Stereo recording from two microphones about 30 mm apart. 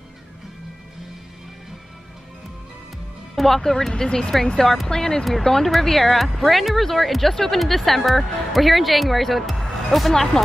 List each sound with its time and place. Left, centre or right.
3.3 s speech: centre